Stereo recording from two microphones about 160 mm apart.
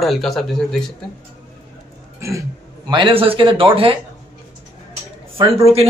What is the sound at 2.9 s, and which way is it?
A man's voice, 35° right (ahead or behind).